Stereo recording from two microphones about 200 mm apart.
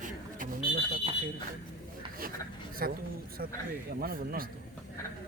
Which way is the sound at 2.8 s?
50° right (ahead or behind).